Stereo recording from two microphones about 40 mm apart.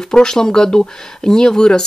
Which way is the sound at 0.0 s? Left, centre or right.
Centre.